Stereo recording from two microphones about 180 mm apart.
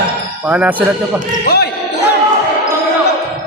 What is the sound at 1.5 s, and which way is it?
Speech, 60° left (ahead or behind).